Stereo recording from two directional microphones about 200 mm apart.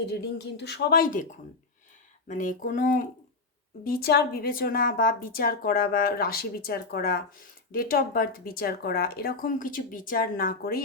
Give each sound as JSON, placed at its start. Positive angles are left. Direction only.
{"t": 0.1, "sound": "a woman's voice", "side_deg": 55}